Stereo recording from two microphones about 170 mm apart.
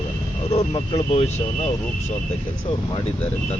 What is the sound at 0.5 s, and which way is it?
Speech, 35° left (ahead or behind).